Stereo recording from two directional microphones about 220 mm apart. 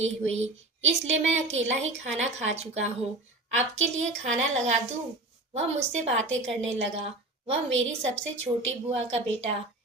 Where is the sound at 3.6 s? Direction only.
30° right (ahead or behind).